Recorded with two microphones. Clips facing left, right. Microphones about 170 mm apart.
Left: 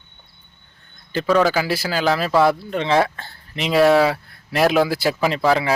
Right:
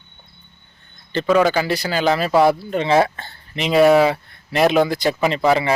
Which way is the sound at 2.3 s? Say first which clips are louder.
Right 2 dB; 25° right (ahead or behind).